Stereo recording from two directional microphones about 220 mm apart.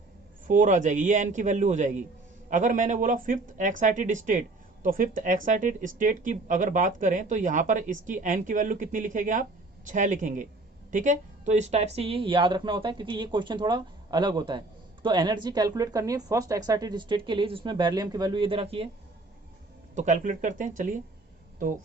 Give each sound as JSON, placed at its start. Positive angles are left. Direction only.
{"t": 0.4, "sound": "speech", "side_deg": -35}
{"t": 20.0, "sound": "speech", "side_deg": -35}